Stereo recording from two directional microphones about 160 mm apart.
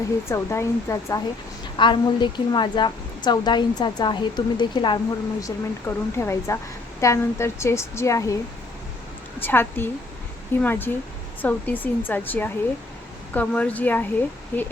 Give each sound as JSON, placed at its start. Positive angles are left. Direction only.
{"t": 0.3, "sound": "a woman's voice", "side_deg": 15}
{"t": 1.7, "sound": "a woman's voice", "side_deg": 30}
{"t": 9.4, "sound": "a woman's voice", "side_deg": 15}